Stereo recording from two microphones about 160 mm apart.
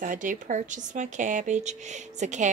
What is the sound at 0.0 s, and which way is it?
Speech, 55° right (ahead or behind).